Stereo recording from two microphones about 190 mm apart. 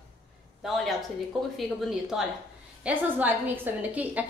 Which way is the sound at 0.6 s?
Centre (ahead or behind).